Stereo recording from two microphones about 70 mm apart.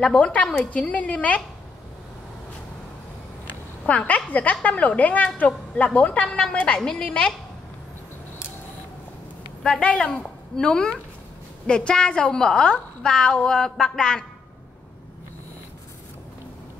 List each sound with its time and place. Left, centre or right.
0.1 s a woman's voice: centre
3.4 s a sound: left
4.3 s a woman's voice: left
9.6 s a woman's voice: centre